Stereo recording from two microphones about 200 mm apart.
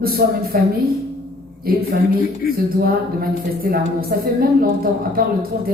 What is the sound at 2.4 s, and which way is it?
Speech, 50° left (ahead or behind).